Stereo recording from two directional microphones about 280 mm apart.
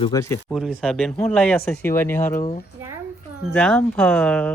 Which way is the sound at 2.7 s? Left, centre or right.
Centre.